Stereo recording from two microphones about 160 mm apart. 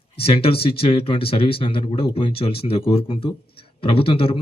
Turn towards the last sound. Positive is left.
turn(degrees=35)  # may be behind; listen again after turning